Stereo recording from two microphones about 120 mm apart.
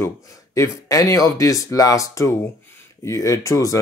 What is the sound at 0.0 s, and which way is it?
Speech, 25° left (ahead or behind).